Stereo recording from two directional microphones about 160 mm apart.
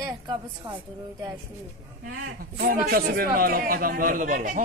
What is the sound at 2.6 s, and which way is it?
A man's voice, 65° right (ahead or behind).